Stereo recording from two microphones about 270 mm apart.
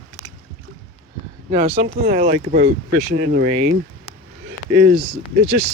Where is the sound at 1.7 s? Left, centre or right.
Right.